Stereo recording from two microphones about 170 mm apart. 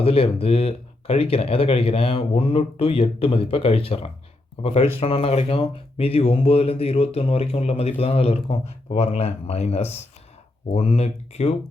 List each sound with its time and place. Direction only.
0.0 s speech: 35° left (ahead or behind)